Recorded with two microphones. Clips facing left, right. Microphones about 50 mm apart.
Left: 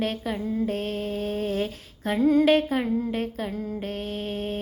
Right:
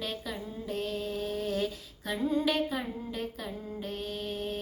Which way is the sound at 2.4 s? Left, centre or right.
Left.